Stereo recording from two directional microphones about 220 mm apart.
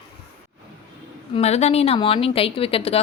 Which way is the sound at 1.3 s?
30° left (ahead or behind).